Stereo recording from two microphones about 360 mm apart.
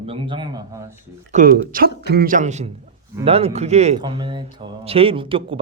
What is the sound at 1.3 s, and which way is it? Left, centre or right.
Speech, right.